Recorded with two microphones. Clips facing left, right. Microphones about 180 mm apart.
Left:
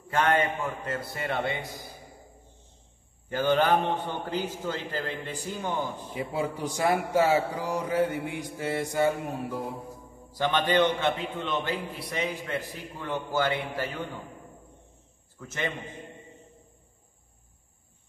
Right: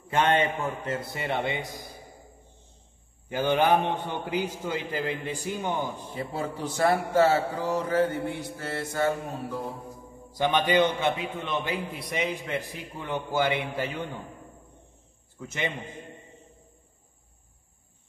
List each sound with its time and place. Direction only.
0.1 s a man's voice: 20° right (ahead or behind)
3.3 s a man's voice: 15° right (ahead or behind)
6.1 s a man's voice: 10° left (ahead or behind)
10.3 s a man's voice: 15° right (ahead or behind)
15.3 s a man's voice: 15° right (ahead or behind)